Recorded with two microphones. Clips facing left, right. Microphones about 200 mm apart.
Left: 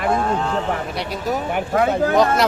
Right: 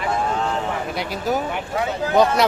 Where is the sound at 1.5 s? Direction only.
50° left (ahead or behind).